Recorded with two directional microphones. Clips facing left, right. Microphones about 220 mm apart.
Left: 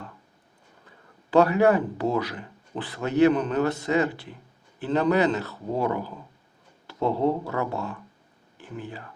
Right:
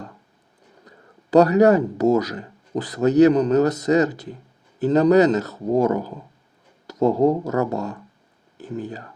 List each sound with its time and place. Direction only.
0.9 s speech: 40° right (ahead or behind)